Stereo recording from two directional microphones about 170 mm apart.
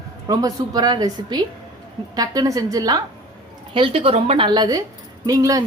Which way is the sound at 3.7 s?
30° right (ahead or behind).